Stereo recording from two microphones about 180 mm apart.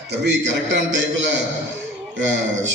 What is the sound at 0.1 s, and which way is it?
Speech, 80° right.